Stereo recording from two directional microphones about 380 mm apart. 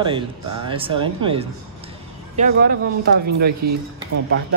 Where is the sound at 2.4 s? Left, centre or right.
Right.